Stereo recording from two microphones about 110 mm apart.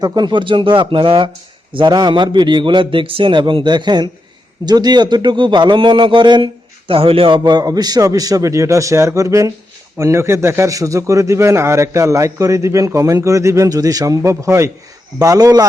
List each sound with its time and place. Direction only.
0.0 s a man's voice: 40° right (ahead or behind)